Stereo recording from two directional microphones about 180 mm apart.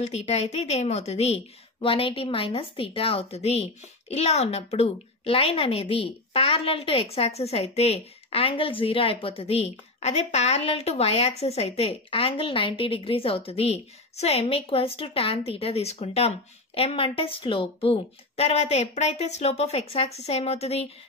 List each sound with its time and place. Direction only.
0.0 s a woman's voice: 35° left (ahead or behind)